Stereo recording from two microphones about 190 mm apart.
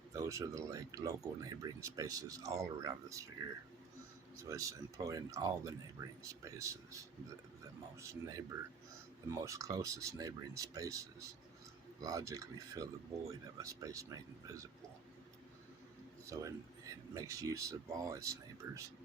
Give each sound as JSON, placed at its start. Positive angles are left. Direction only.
{"t": 0.1, "sound": "speech", "side_deg": -15}
{"t": 4.4, "sound": "speech", "side_deg": -15}
{"t": 7.9, "sound": "speech", "side_deg": -15}
{"t": 16.2, "sound": "speech", "side_deg": -15}